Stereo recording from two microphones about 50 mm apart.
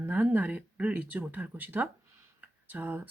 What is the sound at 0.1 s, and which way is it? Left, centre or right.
Speech, right.